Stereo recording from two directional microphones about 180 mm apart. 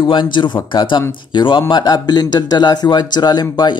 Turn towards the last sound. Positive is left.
turn(degrees=20)  # may be behind; listen again after turning